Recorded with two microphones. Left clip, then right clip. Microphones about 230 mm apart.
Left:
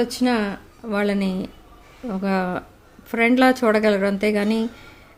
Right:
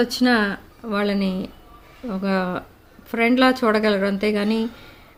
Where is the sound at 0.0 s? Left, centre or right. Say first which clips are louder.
Right 3 dB; centre.